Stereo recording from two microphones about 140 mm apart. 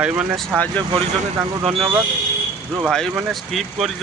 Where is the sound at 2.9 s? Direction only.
Centre (ahead or behind).